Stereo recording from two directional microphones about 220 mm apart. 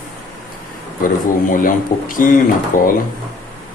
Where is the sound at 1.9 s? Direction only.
40° left (ahead or behind).